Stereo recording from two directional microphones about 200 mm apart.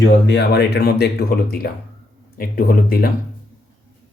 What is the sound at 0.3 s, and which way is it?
Speech, 55° left (ahead or behind).